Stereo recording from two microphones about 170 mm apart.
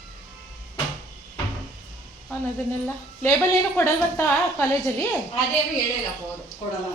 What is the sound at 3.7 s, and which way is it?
Speech, 15° left (ahead or behind).